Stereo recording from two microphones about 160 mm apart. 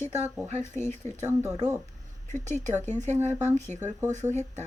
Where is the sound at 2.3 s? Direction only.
50° right (ahead or behind).